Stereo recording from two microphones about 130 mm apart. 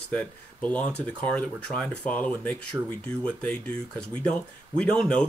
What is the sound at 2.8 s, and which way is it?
Speech, 15° right (ahead or behind).